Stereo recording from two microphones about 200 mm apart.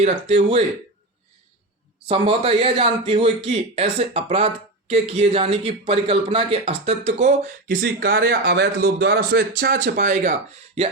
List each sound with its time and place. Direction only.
0.0 s speech: 30° right (ahead or behind)
2.0 s speech: 25° right (ahead or behind)